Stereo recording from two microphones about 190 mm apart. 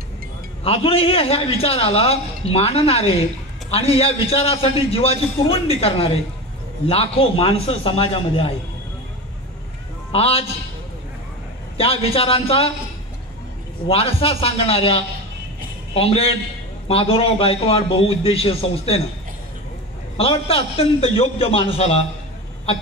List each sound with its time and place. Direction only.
0.7 s a man's voice: 30° left (ahead or behind)
10.1 s a man's voice: 30° left (ahead or behind)
11.7 s a man's voice: 30° left (ahead or behind)
13.8 s a man's voice: 30° left (ahead or behind)
20.2 s a man's voice: 30° left (ahead or behind)